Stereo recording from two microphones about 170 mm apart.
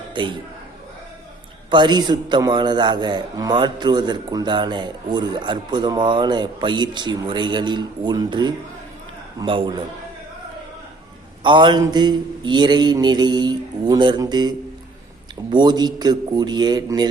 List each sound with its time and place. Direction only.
0.1 s speech: 30° right (ahead or behind)
1.7 s a man's voice: 25° right (ahead or behind)
11.4 s a man's voice: 25° right (ahead or behind)